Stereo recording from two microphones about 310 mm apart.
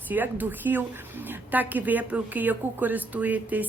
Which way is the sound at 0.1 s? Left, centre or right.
Centre.